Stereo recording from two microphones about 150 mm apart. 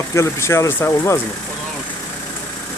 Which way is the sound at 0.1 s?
20° left (ahead or behind).